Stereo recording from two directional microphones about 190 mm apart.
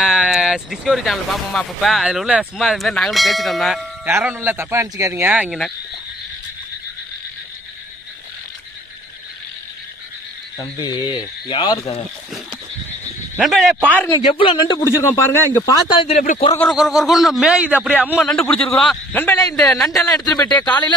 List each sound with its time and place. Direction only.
0.0 s speech: centre (ahead or behind)
4.0 s speech: 10° right (ahead or behind)
10.6 s a man's voice: 20° left (ahead or behind)
13.4 s a man's voice: centre (ahead or behind)
14.1 s a man's voice: 25° left (ahead or behind)
16.5 s speech: centre (ahead or behind)
18.2 s a man's voice: 5° left (ahead or behind)
19.5 s speech: 5° left (ahead or behind)
20.1 s a man's voice: 20° left (ahead or behind)